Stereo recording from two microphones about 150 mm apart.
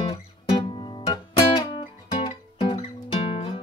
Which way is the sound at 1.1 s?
30° left (ahead or behind).